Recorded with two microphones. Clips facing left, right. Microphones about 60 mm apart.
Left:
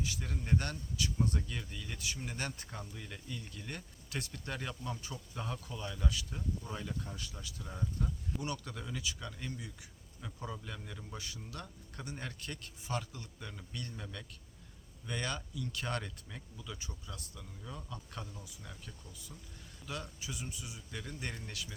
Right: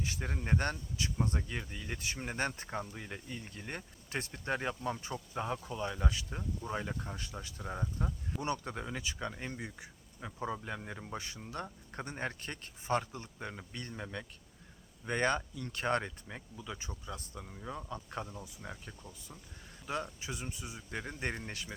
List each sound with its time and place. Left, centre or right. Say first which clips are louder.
0.0 s speech: right 2 dB; right